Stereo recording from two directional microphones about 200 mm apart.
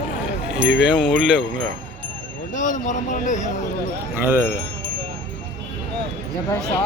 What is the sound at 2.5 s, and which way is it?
Speech, 40° left (ahead or behind).